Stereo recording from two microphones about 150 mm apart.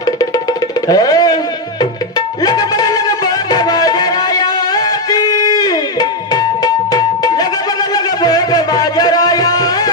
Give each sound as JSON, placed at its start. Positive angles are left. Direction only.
{"t": 0.0, "sound": "music", "side_deg": 25}